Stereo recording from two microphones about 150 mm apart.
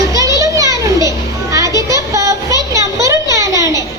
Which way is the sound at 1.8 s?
20° right (ahead or behind).